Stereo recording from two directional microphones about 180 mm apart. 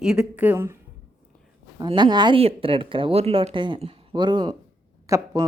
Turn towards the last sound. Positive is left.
turn(degrees=-20)  # may be behind; listen again after turning